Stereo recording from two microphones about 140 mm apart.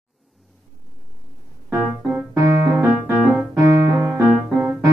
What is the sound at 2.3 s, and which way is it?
Music, 20° right (ahead or behind).